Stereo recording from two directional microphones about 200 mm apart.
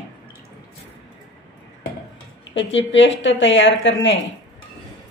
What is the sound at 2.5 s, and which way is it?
A woman's voice, 70° left (ahead or behind).